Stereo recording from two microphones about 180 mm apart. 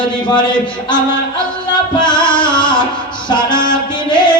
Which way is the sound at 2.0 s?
25° left (ahead or behind).